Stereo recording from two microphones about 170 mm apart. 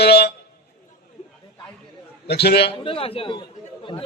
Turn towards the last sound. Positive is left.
turn(degrees=30)  # may be behind; listen again after turning